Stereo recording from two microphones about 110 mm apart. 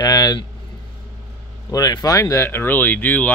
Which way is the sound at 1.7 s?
35° left (ahead or behind).